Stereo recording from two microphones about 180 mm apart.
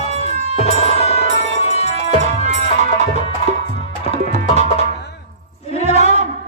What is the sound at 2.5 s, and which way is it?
Music, 40° right (ahead or behind).